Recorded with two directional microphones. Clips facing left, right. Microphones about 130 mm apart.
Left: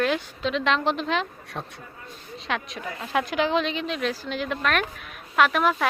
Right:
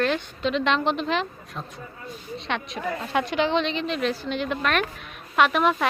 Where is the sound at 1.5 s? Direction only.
75° left (ahead or behind).